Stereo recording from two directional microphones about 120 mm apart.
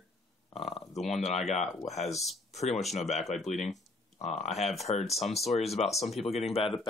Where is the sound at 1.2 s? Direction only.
65° left (ahead or behind).